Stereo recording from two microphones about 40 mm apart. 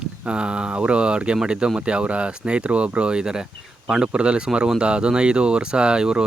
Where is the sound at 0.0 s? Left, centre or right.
Right.